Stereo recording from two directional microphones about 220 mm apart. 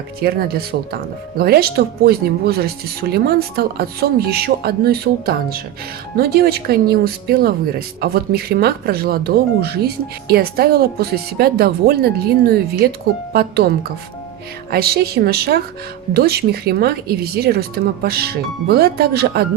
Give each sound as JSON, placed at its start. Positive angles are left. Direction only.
{"t": 0.2, "sound": "speech", "side_deg": -45}
{"t": 13.3, "sound": "speech", "side_deg": -45}